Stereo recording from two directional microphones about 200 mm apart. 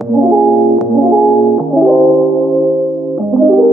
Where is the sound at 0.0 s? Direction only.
Centre (ahead or behind).